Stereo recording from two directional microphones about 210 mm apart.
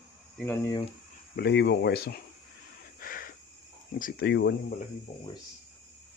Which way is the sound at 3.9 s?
45° left (ahead or behind).